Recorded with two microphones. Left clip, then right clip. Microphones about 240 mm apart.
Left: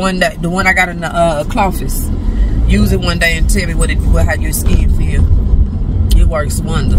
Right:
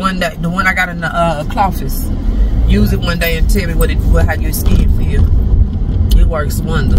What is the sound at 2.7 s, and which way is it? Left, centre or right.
Speech, centre.